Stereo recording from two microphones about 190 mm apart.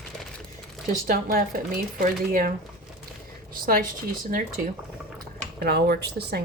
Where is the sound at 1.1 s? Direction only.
50° right (ahead or behind).